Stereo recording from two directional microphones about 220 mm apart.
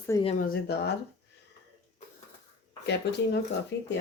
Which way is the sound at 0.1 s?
25° left (ahead or behind).